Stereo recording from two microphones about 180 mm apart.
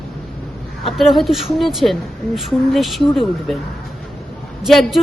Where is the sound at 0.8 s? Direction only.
Centre (ahead or behind).